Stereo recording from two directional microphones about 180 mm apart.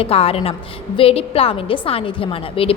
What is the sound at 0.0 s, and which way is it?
A woman's voice, 35° left (ahead or behind).